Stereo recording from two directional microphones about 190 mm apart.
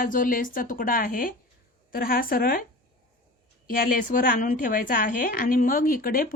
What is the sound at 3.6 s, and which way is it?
A woman's voice, 50° left (ahead or behind).